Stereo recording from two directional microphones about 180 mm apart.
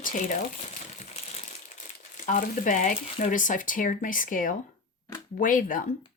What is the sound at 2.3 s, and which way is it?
Speech, 45° left (ahead or behind).